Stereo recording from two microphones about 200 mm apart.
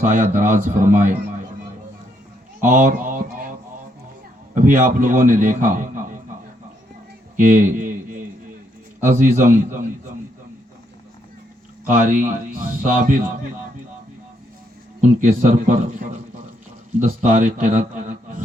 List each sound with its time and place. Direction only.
0.0 s a man's voice: 40° right (ahead or behind)
2.6 s a sound: 40° right (ahead or behind)
4.5 s a man's voice: 40° right (ahead or behind)
7.3 s a sound: 40° right (ahead or behind)
9.0 s a man's voice: 40° right (ahead or behind)
11.9 s a man's voice: 40° right (ahead or behind)
15.2 s a man's voice: 45° right (ahead or behind)